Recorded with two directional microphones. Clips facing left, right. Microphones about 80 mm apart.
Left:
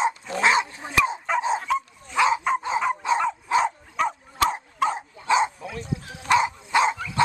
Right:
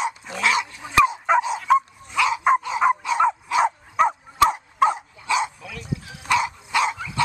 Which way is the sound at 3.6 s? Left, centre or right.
Right.